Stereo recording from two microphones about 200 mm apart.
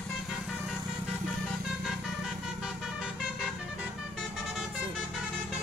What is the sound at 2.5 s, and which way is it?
Vehicle, 5° right (ahead or behind).